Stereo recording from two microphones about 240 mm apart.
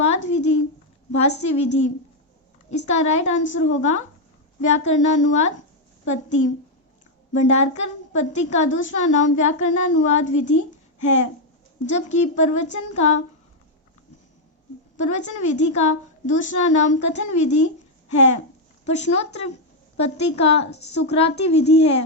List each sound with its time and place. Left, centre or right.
0.0 s a woman's voice: left
7.3 s a woman's voice: left
14.9 s a woman's voice: left